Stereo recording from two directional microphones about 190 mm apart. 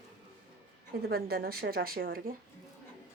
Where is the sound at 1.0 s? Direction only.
55° right (ahead or behind).